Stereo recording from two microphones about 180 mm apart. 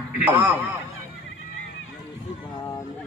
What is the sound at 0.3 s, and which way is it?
Speech, 10° right (ahead or behind).